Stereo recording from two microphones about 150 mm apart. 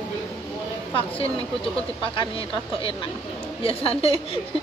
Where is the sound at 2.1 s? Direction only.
35° left (ahead or behind).